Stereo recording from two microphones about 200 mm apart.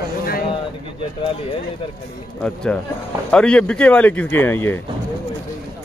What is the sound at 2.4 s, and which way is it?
Speech, 5° left (ahead or behind).